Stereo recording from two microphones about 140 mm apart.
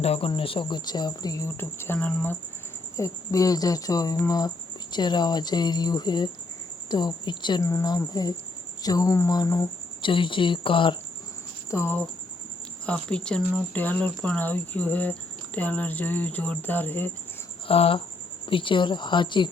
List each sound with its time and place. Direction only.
0.0 s speech: 45° left (ahead or behind); by 2.4 s 10° left (ahead or behind)
2.9 s speech: 25° left (ahead or behind)
7.6 s speech: 20° left (ahead or behind)
10.0 s speech: 35° left (ahead or behind)
11.7 s speech: 15° left (ahead or behind)
17.7 s speech: 45° left (ahead or behind)